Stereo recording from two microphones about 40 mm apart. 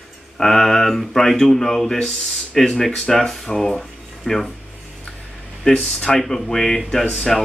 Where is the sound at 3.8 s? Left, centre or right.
Centre.